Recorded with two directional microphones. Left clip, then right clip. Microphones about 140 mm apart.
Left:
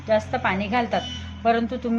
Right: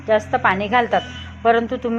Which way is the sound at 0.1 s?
15° right (ahead or behind).